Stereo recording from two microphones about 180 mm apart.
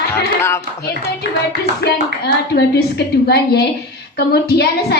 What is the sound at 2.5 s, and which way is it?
A woman's voice, 65° left (ahead or behind).